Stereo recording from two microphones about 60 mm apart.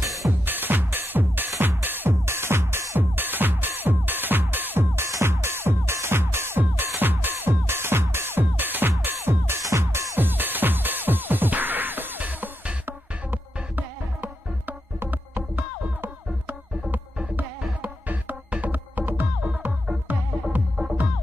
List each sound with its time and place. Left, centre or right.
0.5 s music: right
3.0 s music: right
9.6 s music: right
10.2 s music: right
17.8 s music: right
20.5 s music: centre